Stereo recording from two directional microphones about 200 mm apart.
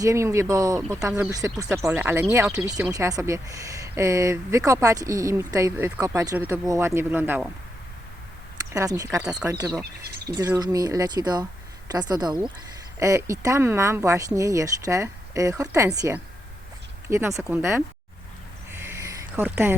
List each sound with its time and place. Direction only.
0.0 s speech: 15° right (ahead or behind)
8.7 s speech: 15° right (ahead or behind)
9.1 s speech: 5° right (ahead or behind)
9.5 s speech: 15° right (ahead or behind)
18.7 s a sound: 10° right (ahead or behind)